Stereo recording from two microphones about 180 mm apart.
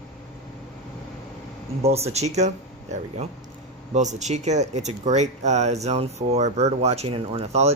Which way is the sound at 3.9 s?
40° right (ahead or behind).